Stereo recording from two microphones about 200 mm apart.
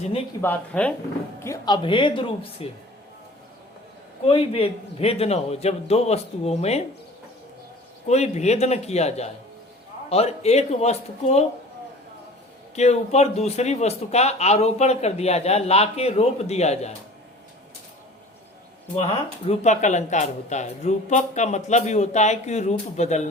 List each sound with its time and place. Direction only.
0.4 s speech: 10° left (ahead or behind)
1.5 s a woman's voice: 20° left (ahead or behind)
4.3 s a man's voice: 30° left (ahead or behind)
8.0 s a man's voice: 35° left (ahead or behind)
12.7 s a man's voice: 35° left (ahead or behind)
19.5 s a man's voice: 35° left (ahead or behind)